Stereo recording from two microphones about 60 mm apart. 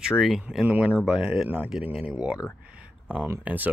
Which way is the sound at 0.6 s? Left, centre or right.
Right.